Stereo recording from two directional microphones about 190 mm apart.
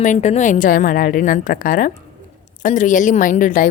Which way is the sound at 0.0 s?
40° left (ahead or behind).